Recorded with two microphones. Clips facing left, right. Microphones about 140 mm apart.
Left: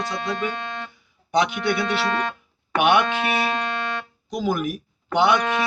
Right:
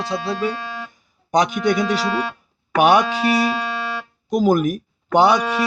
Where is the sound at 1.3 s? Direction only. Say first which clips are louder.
Right 4 dB; 40° right (ahead or behind).